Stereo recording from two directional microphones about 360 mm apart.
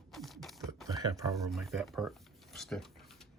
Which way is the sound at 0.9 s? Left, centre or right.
Centre.